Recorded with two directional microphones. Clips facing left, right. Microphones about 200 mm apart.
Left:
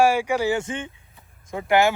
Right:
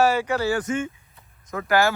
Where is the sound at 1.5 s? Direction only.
20° left (ahead or behind).